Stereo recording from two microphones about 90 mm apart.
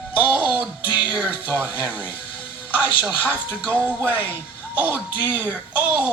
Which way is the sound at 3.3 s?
15° right (ahead or behind).